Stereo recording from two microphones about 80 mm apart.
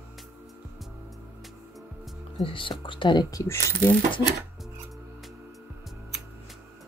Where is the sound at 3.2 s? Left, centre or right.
Left.